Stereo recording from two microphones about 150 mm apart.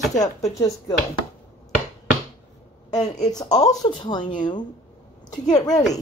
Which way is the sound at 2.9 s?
25° left (ahead or behind).